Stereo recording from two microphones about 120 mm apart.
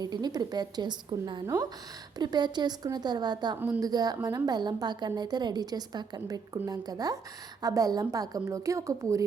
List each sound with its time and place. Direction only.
0.0 s a woman's voice: 35° right (ahead or behind)